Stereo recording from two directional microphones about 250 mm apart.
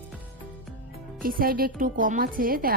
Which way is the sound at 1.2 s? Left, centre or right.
Right.